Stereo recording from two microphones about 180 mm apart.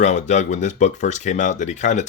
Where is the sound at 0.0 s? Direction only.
40° left (ahead or behind).